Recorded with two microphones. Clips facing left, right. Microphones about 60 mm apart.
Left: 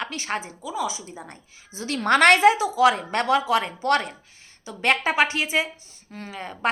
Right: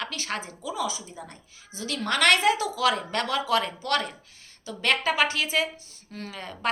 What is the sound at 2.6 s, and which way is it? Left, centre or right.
Speech, centre.